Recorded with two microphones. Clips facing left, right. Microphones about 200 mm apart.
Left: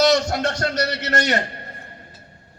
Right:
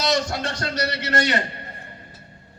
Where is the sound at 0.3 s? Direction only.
60° left (ahead or behind).